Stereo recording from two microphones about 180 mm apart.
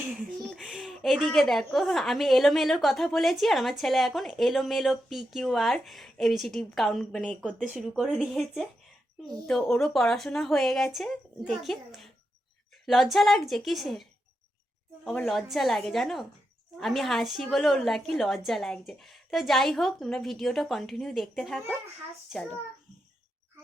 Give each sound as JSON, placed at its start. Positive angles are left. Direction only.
{"t": 0.2, "sound": "a child's voice", "side_deg": 0}